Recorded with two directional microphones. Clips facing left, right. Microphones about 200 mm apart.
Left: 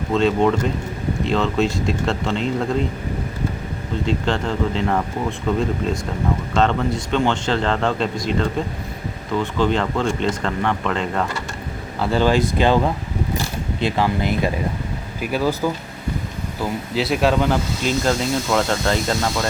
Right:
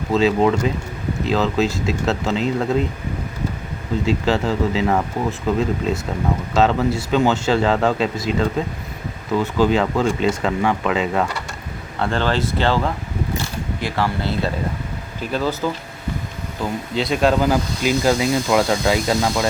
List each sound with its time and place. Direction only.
0.1 s speech: 5° right (ahead or behind)
4.0 s speech: 5° right (ahead or behind)
11.9 s speech: 5° left (ahead or behind)